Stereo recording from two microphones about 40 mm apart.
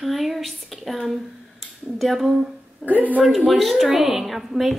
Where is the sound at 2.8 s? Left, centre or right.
Right.